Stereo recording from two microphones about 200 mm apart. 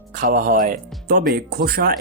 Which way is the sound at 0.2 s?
45° right (ahead or behind).